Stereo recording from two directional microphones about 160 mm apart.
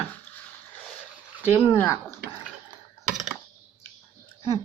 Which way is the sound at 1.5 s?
15° left (ahead or behind).